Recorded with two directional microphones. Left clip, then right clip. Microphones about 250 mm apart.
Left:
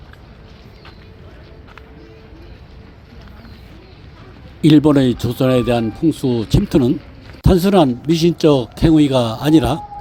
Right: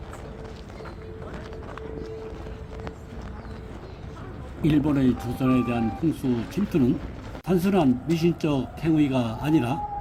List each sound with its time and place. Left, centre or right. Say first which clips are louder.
4.6 s speech: left 11 dB; left